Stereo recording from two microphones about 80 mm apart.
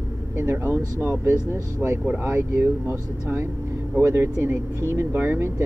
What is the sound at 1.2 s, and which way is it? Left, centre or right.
Speech, right.